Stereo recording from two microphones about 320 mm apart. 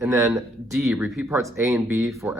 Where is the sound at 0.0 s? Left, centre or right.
Centre.